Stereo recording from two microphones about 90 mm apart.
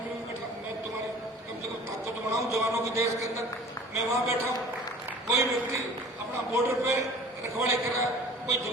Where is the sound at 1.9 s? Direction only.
30° right (ahead or behind).